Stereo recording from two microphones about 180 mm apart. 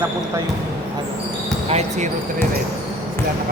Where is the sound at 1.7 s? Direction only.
40° right (ahead or behind).